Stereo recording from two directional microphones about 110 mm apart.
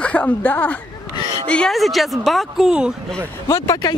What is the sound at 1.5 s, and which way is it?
A woman's voice, 5° left (ahead or behind).